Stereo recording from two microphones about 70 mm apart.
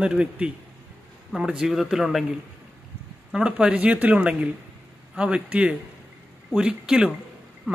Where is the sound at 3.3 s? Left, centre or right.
Centre.